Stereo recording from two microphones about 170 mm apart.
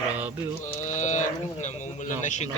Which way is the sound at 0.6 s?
45° left (ahead or behind).